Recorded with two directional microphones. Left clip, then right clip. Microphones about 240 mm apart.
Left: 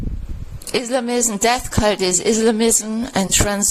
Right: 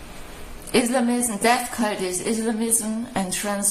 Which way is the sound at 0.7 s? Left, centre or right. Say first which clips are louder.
Left 2 dB; left.